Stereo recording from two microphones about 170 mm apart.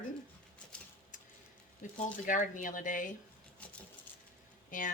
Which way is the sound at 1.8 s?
50° left (ahead or behind).